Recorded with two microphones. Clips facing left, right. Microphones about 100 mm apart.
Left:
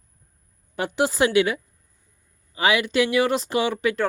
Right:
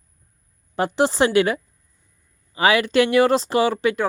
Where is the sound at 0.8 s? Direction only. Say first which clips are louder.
Right 3 dB; 35° right (ahead or behind).